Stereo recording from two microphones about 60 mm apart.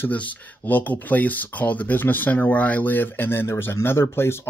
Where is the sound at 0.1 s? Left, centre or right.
Left.